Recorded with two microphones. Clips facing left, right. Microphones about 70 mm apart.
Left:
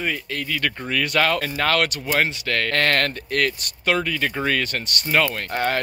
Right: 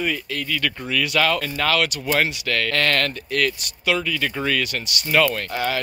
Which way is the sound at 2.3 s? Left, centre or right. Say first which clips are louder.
Even; left.